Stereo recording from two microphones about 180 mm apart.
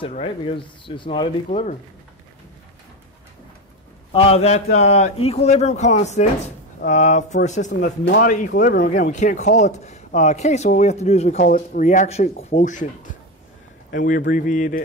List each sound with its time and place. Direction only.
0.1 s speech: 30° left (ahead or behind)
1.5 s speech: 40° left (ahead or behind)
4.1 s speech: 35° left (ahead or behind)